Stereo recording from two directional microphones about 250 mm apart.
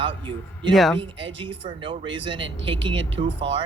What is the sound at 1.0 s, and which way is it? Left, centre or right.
Speech, centre.